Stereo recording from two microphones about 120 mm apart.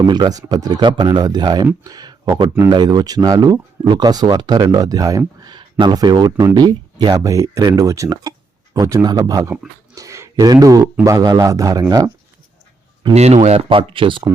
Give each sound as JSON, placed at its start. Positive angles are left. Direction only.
{"t": 0.0, "sound": "speech", "side_deg": -35}
{"t": 1.8, "sound": "a sound", "side_deg": -35}
{"t": 2.6, "sound": "speech", "side_deg": -35}
{"t": 13.1, "sound": "speech", "side_deg": -65}
{"t": 13.7, "sound": "speech", "side_deg": -45}